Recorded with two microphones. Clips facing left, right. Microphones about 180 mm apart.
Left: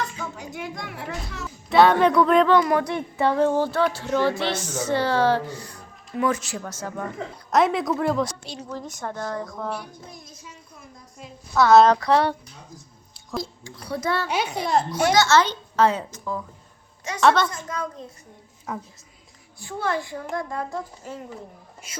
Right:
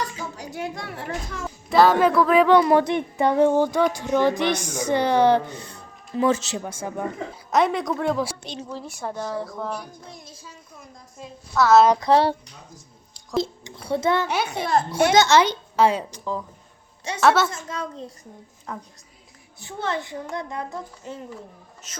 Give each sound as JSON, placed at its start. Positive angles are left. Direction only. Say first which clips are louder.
{"t": 0.9, "sound": "speech", "louder": "right 2 dB", "side_deg": -45}
{"t": 1.7, "sound": "speech", "louder": "even", "side_deg": 0}
{"t": 2.6, "sound": "female singing", "louder": "right 3 dB", "side_deg": -30}
{"t": 7.5, "sound": "speech", "louder": "left 1 dB", "side_deg": 0}
{"t": 10.1, "sound": "a child's voice", "louder": "right 1 dB", "side_deg": -30}
{"t": 11.5, "sound": "speech", "louder": "left 1 dB", "side_deg": 0}
{"t": 11.9, "sound": "a child's voice", "louder": "right 2 dB", "side_deg": -25}
{"t": 13.8, "sound": "a child's voice", "louder": "right 4 dB", "side_deg": -25}
{"t": 15.1, "sound": "female singing", "louder": "right 2 dB", "side_deg": -20}
{"t": 17.2, "sound": "speech", "louder": "even", "side_deg": -5}
{"t": 17.5, "sound": "a child's voice", "louder": "even", "side_deg": -25}
{"t": 18.7, "sound": "a woman's voice", "louder": "left 3 dB", "side_deg": 10}
{"t": 19.5, "sound": "a child's voice", "louder": "left 1 dB", "side_deg": -20}
{"t": 21.8, "sound": "a woman's voice", "louder": "left 3 dB", "side_deg": 10}